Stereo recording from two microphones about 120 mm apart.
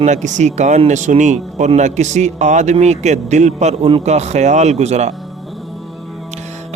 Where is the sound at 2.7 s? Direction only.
70° right (ahead or behind).